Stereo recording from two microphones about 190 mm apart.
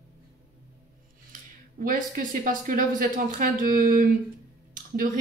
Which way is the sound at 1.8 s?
45° right (ahead or behind).